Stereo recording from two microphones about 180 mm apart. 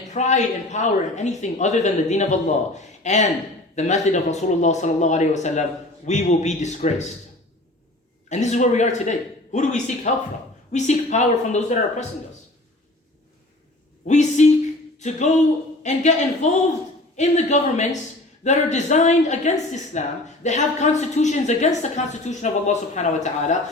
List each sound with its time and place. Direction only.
0.1 s a woman's voice: 40° left (ahead or behind)
8.3 s a woman's voice: 40° left (ahead or behind)
14.1 s a woman's voice: 40° left (ahead or behind)
14.9 s a sound: 40° left (ahead or behind)
15.8 s a woman's voice: 40° left (ahead or behind)